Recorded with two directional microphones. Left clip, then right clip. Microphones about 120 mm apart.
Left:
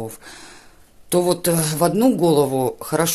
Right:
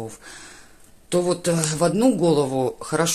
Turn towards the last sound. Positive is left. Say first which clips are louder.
# left 2 dB
turn(degrees=25)  # may be behind; listen again after turning